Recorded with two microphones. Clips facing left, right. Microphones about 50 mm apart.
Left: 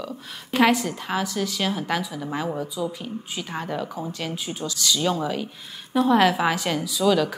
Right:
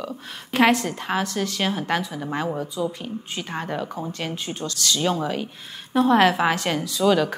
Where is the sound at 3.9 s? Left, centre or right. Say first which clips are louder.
Right 1 dB; centre.